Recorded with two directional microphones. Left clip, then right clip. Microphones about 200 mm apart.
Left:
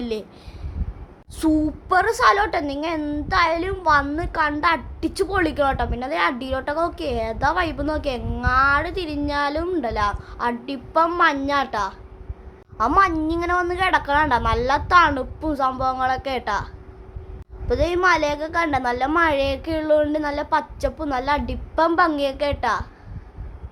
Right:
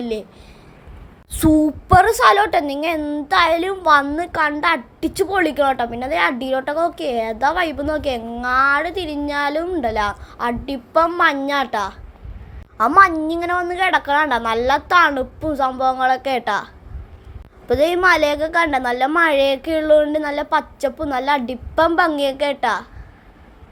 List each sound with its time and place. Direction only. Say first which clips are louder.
0.0 s speech: right 3 dB; 5° right (ahead or behind)
1.4 s a woman's voice: right 5 dB; 20° right (ahead or behind)
3.3 s a woman's voice: right 4 dB; 15° right (ahead or behind)
13.0 s a woman's voice: right 7 dB; 15° right (ahead or behind)
17.7 s a woman's voice: right 4 dB; 15° right (ahead or behind)